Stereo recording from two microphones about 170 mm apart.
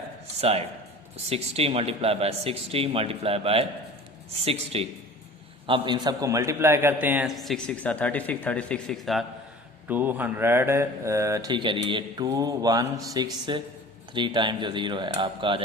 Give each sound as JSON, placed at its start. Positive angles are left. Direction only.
{"t": 1.1, "sound": "a man's voice", "side_deg": -35}
{"t": 9.9, "sound": "speech", "side_deg": -10}